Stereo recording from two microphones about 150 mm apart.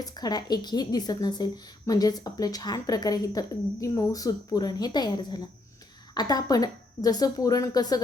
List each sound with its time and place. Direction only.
0.0 s a woman's voice: 25° left (ahead or behind)